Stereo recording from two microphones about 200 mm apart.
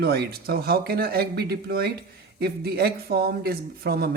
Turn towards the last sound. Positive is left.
turn(degrees=-50)  # may be behind; listen again after turning